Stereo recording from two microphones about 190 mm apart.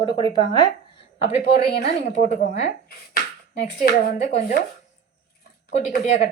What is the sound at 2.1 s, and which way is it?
Speech, 35° left (ahead or behind).